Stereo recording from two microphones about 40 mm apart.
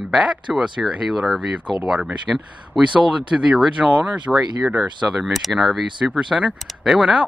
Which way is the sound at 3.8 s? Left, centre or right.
Centre.